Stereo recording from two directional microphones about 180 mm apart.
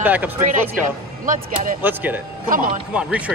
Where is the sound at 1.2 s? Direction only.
45° right (ahead or behind).